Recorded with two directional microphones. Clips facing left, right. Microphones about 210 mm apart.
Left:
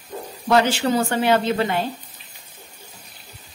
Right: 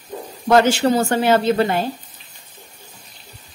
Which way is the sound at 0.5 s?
45° right (ahead or behind).